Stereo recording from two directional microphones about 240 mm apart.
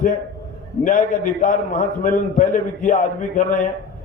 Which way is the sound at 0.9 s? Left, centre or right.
Left.